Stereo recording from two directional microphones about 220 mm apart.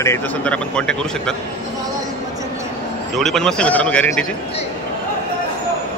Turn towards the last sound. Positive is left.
turn(degrees=5)  # may be behind; listen again after turning